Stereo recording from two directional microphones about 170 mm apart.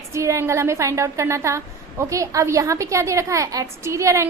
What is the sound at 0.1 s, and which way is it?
A woman's voice, 15° right (ahead or behind).